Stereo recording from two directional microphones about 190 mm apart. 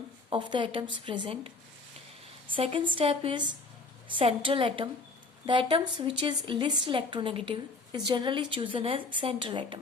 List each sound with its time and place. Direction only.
0.3 s a woman's voice: 25° right (ahead or behind)